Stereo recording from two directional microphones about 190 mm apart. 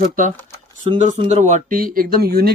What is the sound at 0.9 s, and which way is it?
A man's voice, 25° right (ahead or behind).